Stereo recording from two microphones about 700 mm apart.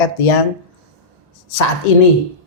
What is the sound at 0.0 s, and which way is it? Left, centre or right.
Speech, left.